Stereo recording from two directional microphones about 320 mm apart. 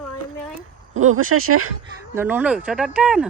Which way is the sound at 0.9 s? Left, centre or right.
Right.